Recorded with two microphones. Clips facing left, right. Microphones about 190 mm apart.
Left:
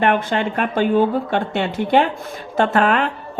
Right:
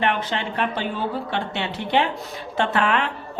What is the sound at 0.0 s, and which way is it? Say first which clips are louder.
Speech: left 6 dB; 50° left (ahead or behind).